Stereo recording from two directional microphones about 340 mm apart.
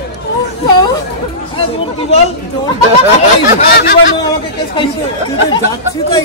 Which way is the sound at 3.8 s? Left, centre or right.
Left.